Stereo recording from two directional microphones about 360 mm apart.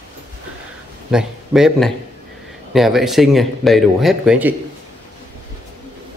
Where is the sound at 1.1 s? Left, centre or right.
Centre.